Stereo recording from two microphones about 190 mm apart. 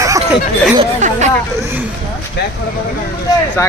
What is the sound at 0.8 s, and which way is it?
Speech, 40° right (ahead or behind).